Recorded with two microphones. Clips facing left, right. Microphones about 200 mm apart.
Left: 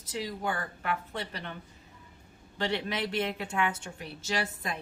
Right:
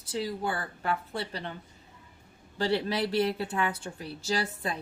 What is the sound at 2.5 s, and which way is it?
A woman's voice, 30° right (ahead or behind).